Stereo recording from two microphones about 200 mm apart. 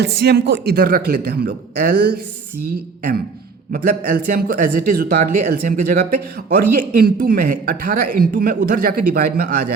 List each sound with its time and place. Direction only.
0.0 s speech: 55° right (ahead or behind)
3.7 s speech: 45° right (ahead or behind)